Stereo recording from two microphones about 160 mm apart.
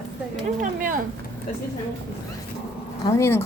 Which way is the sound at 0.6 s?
55° right (ahead or behind).